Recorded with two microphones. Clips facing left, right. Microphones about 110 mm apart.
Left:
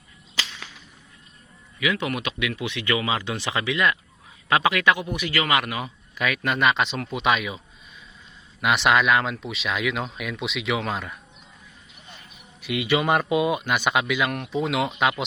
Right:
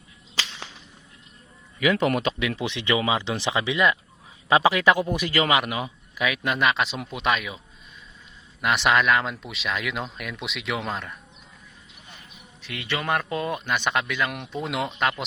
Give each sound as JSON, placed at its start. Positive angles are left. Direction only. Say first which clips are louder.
{"t": 1.8, "sound": "speech", "louder": "right 4 dB", "side_deg": -40}
{"t": 4.9, "sound": "speech", "louder": "right 3 dB", "side_deg": -40}
{"t": 5.5, "sound": "speech", "louder": "right 1 dB", "side_deg": -20}
{"t": 6.1, "sound": "speech", "louder": "even", "side_deg": -5}
{"t": 8.6, "sound": "speech", "louder": "left 1 dB", "side_deg": 0}
{"t": 12.6, "sound": "speech", "louder": "left 6 dB", "side_deg": 15}